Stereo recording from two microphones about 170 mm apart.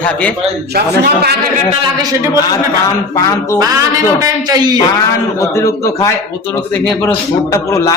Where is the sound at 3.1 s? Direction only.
15° left (ahead or behind).